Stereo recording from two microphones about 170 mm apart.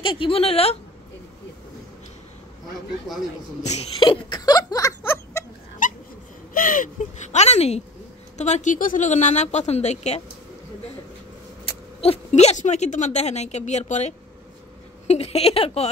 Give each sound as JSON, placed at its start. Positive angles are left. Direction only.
{"t": 0.0, "sound": "speech", "side_deg": 30}
{"t": 3.6, "sound": "snicker", "side_deg": 40}
{"t": 6.5, "sound": "speech", "side_deg": 55}
{"t": 11.6, "sound": "speech", "side_deg": 35}